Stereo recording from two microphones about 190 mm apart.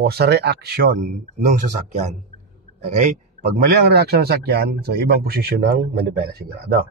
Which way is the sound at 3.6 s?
55° right (ahead or behind).